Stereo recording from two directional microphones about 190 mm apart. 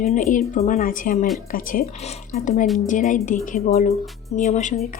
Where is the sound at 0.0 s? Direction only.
40° left (ahead or behind).